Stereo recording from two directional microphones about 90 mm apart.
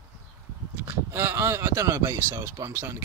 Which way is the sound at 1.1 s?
25° right (ahead or behind).